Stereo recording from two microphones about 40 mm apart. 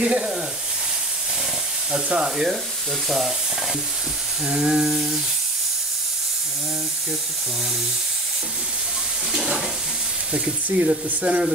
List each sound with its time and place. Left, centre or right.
0.0 s speech: right
2.2 s frying: centre
3.1 s stir: centre
4.5 s frying: centre
9.3 s frying: centre
10.3 s speech: right